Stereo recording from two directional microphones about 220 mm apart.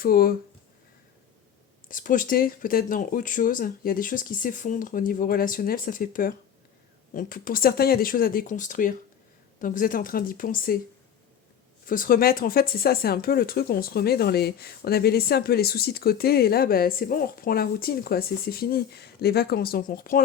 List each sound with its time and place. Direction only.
0.0 s speech: 40° left (ahead or behind)
1.9 s speech: 40° left (ahead or behind)
11.9 s speech: 40° left (ahead or behind)